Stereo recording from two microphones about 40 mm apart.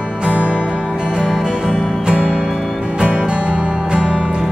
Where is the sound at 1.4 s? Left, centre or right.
Centre.